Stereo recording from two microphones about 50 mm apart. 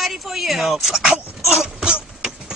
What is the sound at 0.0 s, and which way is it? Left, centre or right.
A man's voice, centre.